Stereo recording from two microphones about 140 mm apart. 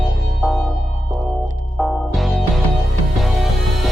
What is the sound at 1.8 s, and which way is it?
Music, centre (ahead or behind).